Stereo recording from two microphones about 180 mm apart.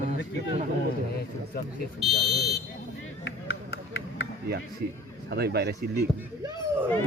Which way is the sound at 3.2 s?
70° left (ahead or behind).